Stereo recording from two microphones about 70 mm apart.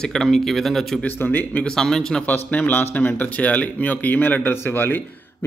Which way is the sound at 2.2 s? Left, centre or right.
Left.